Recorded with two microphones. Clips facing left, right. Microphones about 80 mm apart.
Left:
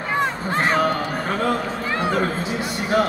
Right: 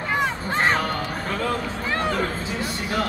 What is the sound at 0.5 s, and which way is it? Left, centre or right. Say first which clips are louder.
Crowd: right 1 dB; centre.